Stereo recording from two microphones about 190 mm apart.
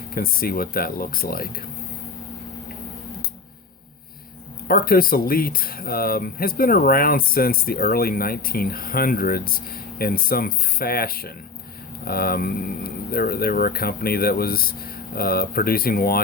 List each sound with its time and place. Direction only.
0.1 s speech: 50° left (ahead or behind)
4.7 s speech: 50° left (ahead or behind)